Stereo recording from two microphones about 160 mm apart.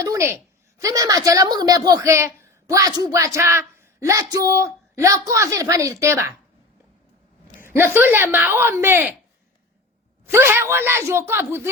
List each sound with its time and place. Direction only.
0.0 s a woman's voice: 20° right (ahead or behind)
7.6 s speech: 15° right (ahead or behind)
10.2 s speech: 15° right (ahead or behind)